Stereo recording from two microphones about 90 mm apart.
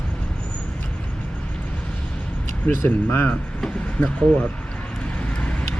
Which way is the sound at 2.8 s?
20° left (ahead or behind).